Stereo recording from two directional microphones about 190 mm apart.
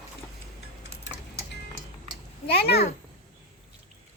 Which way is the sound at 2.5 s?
60° left (ahead or behind).